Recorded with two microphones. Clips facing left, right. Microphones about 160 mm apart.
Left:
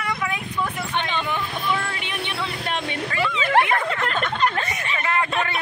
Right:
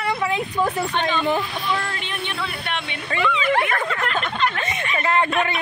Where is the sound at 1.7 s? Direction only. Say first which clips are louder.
Right 2 dB; 10° left (ahead or behind).